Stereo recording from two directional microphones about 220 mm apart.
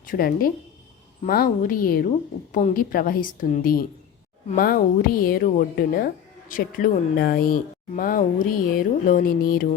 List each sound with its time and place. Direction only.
0.0 s speech: 40° left (ahead or behind)